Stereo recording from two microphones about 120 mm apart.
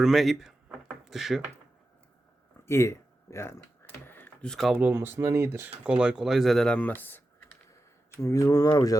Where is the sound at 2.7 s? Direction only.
25° left (ahead or behind).